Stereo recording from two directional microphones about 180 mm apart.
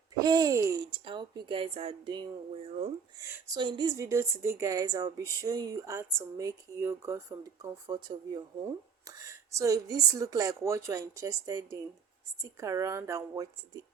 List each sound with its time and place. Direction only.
0.2 s a woman's voice: 20° right (ahead or behind)
2.6 s speech: 35° right (ahead or behind)
3.2 s a woman's voice: 15° right (ahead or behind)